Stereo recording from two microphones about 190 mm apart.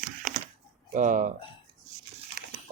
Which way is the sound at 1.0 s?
40° right (ahead or behind).